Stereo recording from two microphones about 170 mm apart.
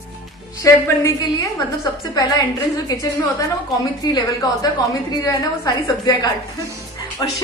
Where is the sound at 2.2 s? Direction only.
20° left (ahead or behind).